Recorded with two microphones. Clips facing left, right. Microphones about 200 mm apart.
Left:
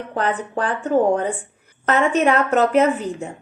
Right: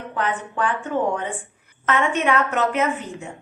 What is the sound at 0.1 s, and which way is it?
A woman's voice, 35° left (ahead or behind).